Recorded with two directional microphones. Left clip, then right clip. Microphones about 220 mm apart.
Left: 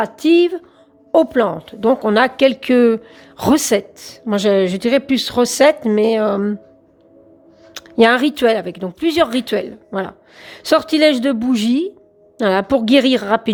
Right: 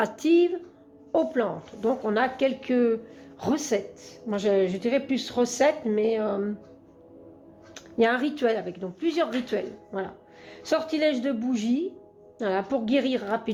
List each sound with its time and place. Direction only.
0.0 s a woman's voice: 30° left (ahead or behind)
7.7 s a woman's voice: 40° left (ahead or behind)